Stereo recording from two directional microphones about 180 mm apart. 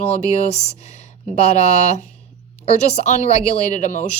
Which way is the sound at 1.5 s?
40° left (ahead or behind).